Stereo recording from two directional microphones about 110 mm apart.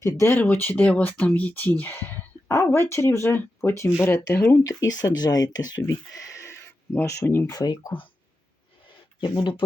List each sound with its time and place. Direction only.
0.0 s speech: 30° left (ahead or behind)
0.3 s speech: 15° left (ahead or behind)
7.5 s speech: 35° left (ahead or behind)
9.2 s speech: 45° left (ahead or behind)